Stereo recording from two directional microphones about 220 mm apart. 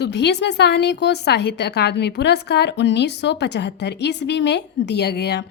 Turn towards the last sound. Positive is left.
turn(degrees=50)  # may be behind; listen again after turning